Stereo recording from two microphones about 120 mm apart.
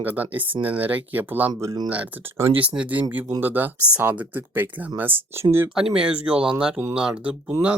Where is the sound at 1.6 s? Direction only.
35° right (ahead or behind).